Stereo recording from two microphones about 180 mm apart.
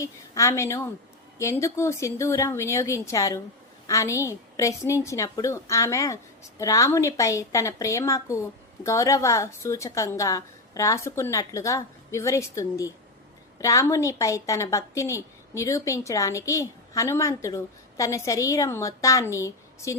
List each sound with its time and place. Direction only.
0.0 s a woman's voice: 15° left (ahead or behind)